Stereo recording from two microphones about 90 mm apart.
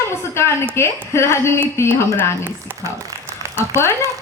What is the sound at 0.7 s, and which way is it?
A woman's voice, 30° left (ahead or behind).